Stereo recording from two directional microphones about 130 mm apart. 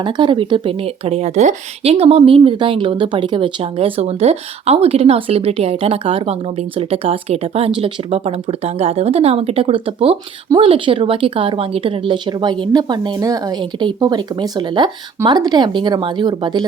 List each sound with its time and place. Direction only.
0.0 s a woman's voice: 40° right (ahead or behind)